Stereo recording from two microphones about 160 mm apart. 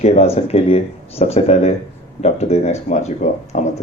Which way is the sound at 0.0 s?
40° left (ahead or behind).